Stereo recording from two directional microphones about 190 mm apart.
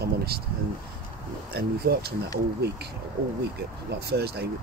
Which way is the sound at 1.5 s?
55° right (ahead or behind).